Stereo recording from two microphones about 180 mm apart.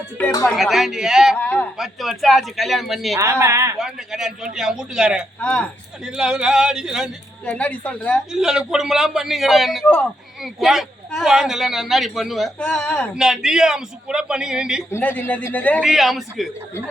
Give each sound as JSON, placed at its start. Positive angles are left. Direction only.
{"t": 0.4, "sound": "a man's voice", "side_deg": 0}
{"t": 1.4, "sound": "a man's voice", "side_deg": 10}
{"t": 1.8, "sound": "a man's voice", "side_deg": 0}
{"t": 3.2, "sound": "speech", "side_deg": -15}
{"t": 3.8, "sound": "a man's voice", "side_deg": -5}
{"t": 5.4, "sound": "a man's voice", "side_deg": 5}
{"t": 7.4, "sound": "a man's voice", "side_deg": 5}
{"t": 8.3, "sound": "a man's voice", "side_deg": -5}
{"t": 14.8, "sound": "a man's voice", "side_deg": 10}
{"t": 15.8, "sound": "a man's voice", "side_deg": 0}